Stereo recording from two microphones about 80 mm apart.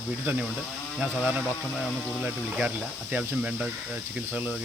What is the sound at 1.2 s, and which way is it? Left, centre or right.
Speech, centre.